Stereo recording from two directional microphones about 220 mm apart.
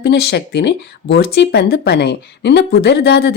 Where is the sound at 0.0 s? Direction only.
45° left (ahead or behind).